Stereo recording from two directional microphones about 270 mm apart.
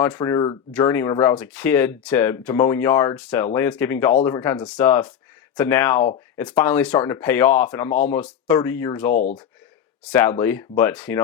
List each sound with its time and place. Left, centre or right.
0.0 s speech: centre
9.1 s speech: left
10.0 s speech: centre